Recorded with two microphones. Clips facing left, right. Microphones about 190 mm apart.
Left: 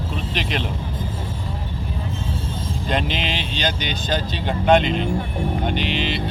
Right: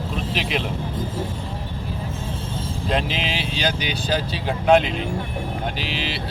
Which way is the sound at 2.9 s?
Centre (ahead or behind).